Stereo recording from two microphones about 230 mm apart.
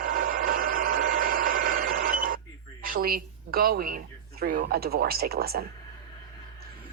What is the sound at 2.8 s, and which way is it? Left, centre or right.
A woman's voice, right.